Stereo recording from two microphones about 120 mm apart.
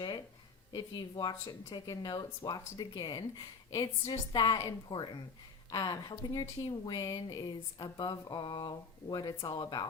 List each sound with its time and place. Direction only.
0.7 s speech: 35° left (ahead or behind)